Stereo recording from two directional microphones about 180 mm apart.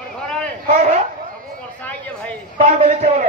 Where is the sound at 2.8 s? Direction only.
40° right (ahead or behind).